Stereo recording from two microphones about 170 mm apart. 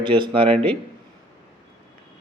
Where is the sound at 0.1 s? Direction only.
30° right (ahead or behind).